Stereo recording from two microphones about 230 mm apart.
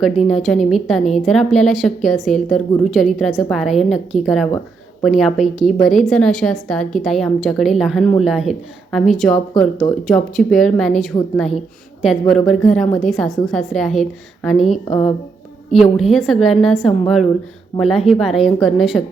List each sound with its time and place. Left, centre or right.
0.3 s a woman's voice: centre